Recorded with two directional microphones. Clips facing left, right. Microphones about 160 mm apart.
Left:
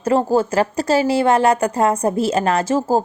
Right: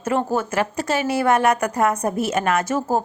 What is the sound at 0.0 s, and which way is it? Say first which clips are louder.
A woman's voice: left 5 dB; 35° left (ahead or behind).